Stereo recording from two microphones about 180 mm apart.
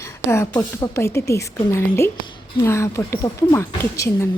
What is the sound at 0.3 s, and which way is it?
Speech, 15° left (ahead or behind).